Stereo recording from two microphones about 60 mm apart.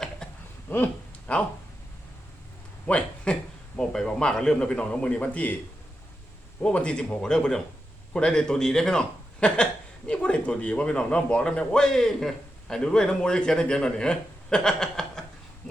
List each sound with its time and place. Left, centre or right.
0.7 s speech: left
1.3 s speech: left
2.8 s a man's voice: left
3.8 s a man's voice: centre
6.6 s a man's voice: centre